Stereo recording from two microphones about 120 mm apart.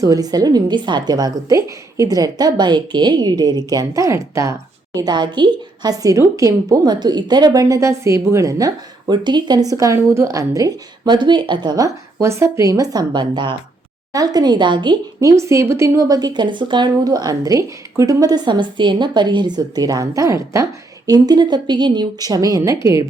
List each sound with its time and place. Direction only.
0.0 s a woman's voice: 30° right (ahead or behind)
11.0 s a woman's voice: 40° right (ahead or behind)
15.3 s a woman's voice: 25° right (ahead or behind)
21.1 s a woman's voice: 35° right (ahead or behind)